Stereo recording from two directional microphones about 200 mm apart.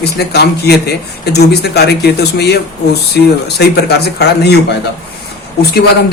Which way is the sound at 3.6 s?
55° left (ahead or behind).